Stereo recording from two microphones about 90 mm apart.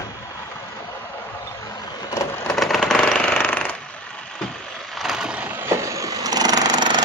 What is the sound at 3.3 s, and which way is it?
Jackhammer, 20° left (ahead or behind).